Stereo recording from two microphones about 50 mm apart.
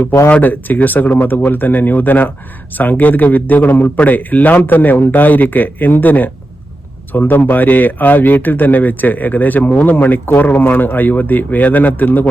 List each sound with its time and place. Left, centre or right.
0.3 s a man's voice: left